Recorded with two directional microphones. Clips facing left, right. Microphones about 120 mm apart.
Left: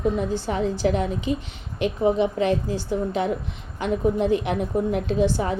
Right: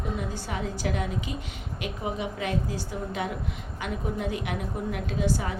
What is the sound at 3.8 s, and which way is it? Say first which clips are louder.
A woman's voice: left 10 dB; 30° left (ahead or behind).